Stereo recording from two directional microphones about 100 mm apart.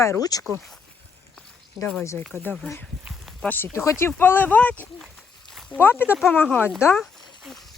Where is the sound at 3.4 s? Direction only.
20° left (ahead or behind).